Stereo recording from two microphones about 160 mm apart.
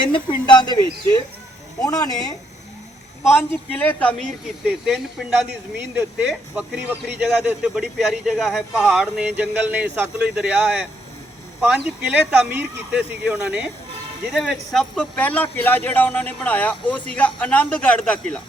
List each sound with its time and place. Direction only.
0.1 s a man's voice: 30° left (ahead or behind); by 4.3 s 10° left (ahead or behind)
4.6 s a man's voice: 5° right (ahead or behind)